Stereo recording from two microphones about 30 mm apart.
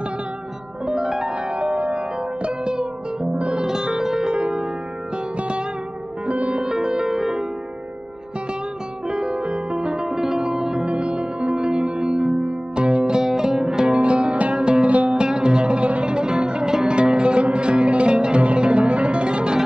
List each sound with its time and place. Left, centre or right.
0.9 s music: centre
1.5 s music: right; by 4.3 s centre
4.3 s music: right
6.2 s music: right
6.5 s music: right
9.0 s music: right
11.1 s music: right
12.0 s singing bowl: right
12.4 s music: right
13.2 s music: centre
13.9 s music: right